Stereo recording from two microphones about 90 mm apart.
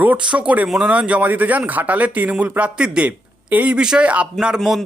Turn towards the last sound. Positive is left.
turn(degrees=5)  # may be behind; listen again after turning